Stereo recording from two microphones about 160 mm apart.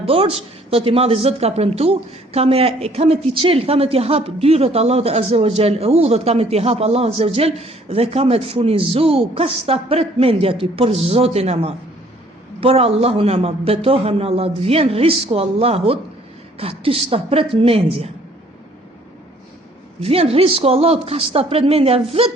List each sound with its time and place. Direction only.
0.0 s speech: 35° right (ahead or behind)
20.0 s speech: 35° right (ahead or behind)